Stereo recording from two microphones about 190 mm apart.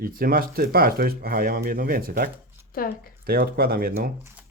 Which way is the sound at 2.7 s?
50° left (ahead or behind).